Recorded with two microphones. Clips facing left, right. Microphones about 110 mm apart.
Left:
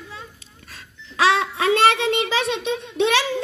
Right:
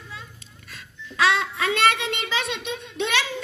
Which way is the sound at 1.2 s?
40° left (ahead or behind).